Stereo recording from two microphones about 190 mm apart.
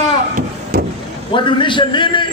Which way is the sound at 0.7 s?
45° right (ahead or behind).